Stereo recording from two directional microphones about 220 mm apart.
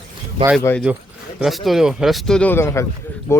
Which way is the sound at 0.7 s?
10° left (ahead or behind).